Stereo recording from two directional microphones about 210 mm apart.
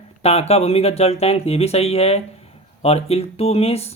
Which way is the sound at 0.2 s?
30° left (ahead or behind).